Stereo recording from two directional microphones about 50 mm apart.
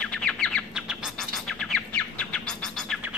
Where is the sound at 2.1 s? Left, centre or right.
Centre.